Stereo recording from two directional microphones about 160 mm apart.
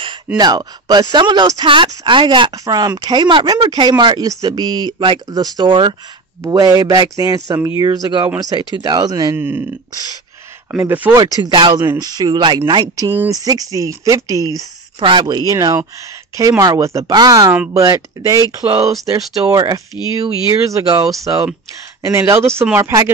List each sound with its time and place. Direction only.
0.4 s speech: 25° right (ahead or behind)
10.8 s speech: 10° right (ahead or behind)
11.4 s speech: 30° right (ahead or behind)